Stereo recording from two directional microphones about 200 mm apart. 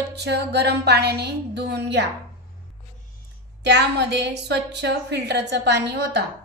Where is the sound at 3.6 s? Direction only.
55° right (ahead or behind).